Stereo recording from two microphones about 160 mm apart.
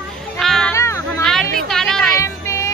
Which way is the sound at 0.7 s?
20° left (ahead or behind).